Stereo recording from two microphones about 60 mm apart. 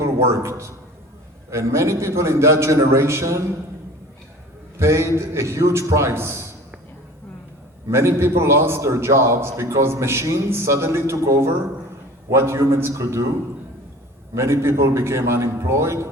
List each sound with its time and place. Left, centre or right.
0.0 s a man's voice: right
4.8 s a man's voice: right
7.9 s a man's voice: right
14.3 s a man's voice: right